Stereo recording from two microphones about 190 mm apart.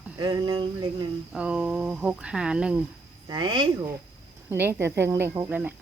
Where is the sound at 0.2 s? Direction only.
20° right (ahead or behind).